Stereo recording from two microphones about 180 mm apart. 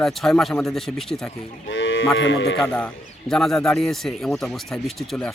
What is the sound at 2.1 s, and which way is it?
Speech, 90° left.